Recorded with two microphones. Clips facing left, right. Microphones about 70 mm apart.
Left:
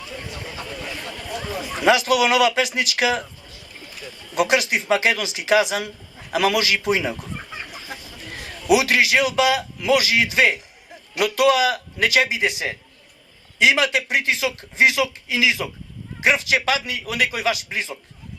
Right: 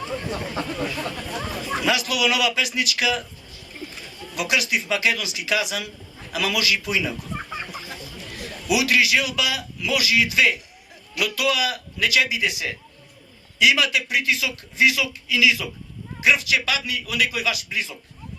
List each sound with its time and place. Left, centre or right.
0.0 s a sound: right
1.8 s speech: left
4.4 s speech: left
7.5 s chicken: right
7.9 s a man's voice: left